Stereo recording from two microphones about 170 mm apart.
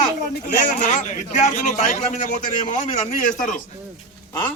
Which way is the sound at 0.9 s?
45° left (ahead or behind).